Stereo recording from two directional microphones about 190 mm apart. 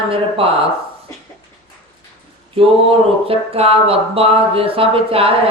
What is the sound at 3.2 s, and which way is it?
Speech, 30° right (ahead or behind).